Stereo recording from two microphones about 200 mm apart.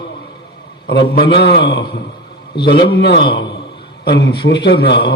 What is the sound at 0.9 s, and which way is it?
A man's voice, 55° left (ahead or behind).